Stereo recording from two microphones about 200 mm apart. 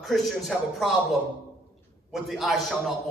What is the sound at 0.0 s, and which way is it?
A man's voice, centre (ahead or behind).